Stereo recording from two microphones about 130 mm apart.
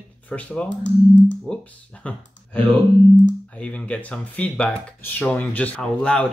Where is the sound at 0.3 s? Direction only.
10° left (ahead or behind).